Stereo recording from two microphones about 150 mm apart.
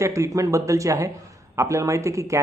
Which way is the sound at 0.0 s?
20° right (ahead or behind).